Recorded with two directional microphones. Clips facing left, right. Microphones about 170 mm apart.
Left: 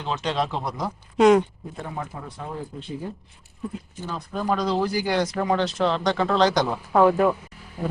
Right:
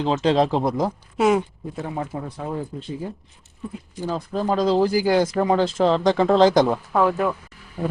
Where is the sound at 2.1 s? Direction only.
30° right (ahead or behind).